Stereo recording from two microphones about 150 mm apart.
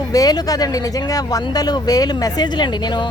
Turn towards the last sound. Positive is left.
turn(degrees=30)  # may be behind; listen again after turning